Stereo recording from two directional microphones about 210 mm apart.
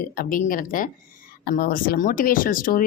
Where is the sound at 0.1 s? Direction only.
40° left (ahead or behind).